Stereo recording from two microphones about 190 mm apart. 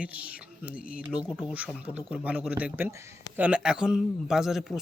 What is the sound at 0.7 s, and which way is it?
Speech, 50° left (ahead or behind).